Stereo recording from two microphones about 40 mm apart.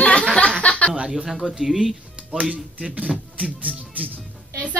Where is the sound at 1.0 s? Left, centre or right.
Right.